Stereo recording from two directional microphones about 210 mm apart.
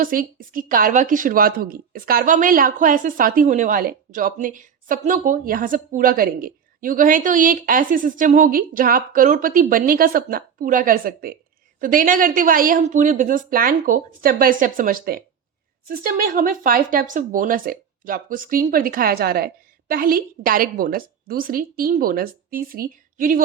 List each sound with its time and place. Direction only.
0.0 s a woman's voice: 40° right (ahead or behind)